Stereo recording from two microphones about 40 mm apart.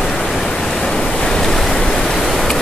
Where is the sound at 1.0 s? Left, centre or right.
Centre.